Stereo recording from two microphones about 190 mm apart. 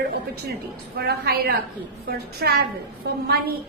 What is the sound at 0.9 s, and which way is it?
A woman's voice, 55° right (ahead or behind).